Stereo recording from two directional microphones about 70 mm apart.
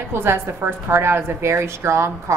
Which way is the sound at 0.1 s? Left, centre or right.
Right.